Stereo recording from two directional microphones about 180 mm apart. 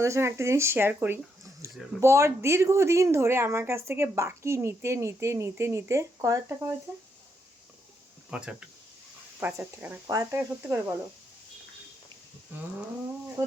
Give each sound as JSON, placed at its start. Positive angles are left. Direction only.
{"t": 0.0, "sound": "speech", "side_deg": -15}
{"t": 8.3, "sound": "speech", "side_deg": -5}
{"t": 10.6, "sound": "speech", "side_deg": -10}